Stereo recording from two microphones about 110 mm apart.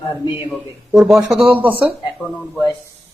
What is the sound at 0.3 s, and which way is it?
Speech, 45° left (ahead or behind).